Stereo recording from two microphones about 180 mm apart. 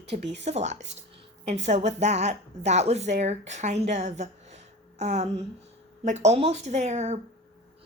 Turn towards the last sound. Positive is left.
turn(degrees=-40)  # may be behind; listen again after turning